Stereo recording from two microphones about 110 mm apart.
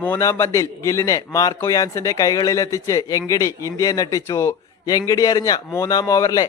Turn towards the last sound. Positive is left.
turn(degrees=35)  # may be behind; listen again after turning